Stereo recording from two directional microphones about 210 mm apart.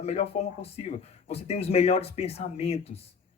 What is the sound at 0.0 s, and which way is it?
Speech, 30° left (ahead or behind).